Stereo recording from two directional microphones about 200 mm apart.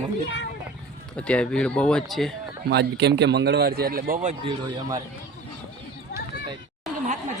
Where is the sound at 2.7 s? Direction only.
55° right (ahead or behind); by 4.4 s 40° right (ahead or behind).